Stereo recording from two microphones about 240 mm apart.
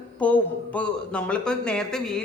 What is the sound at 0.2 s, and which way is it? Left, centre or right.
Speech, centre.